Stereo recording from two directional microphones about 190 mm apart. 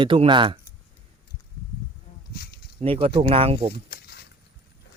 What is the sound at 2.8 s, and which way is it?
Speech, 30° right (ahead or behind).